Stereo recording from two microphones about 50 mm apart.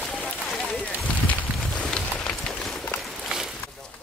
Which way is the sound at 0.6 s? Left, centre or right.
Centre.